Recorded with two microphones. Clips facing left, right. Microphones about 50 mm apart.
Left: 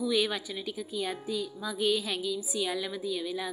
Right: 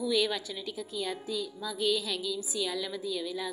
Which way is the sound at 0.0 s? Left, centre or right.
Centre.